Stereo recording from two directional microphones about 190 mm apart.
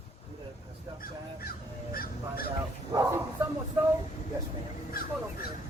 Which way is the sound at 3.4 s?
10° right (ahead or behind).